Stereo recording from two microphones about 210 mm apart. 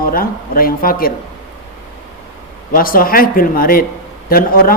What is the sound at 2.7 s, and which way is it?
Speech, 45° left (ahead or behind).